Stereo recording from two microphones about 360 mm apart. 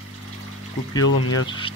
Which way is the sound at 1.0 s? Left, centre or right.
Left.